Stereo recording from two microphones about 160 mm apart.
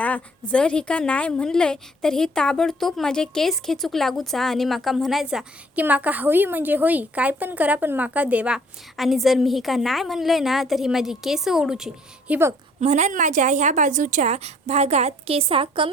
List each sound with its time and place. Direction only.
0.0 s a woman's voice: 5° left (ahead or behind)
12.3 s a woman's voice: 15° right (ahead or behind)
12.8 s a woman's voice: 45° right (ahead or behind)